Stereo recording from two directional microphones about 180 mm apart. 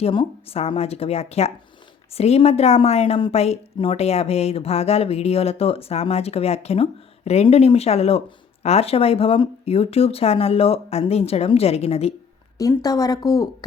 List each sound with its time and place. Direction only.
0.0 s a woman's voice: 30° left (ahead or behind)
12.5 s speech: 20° left (ahead or behind)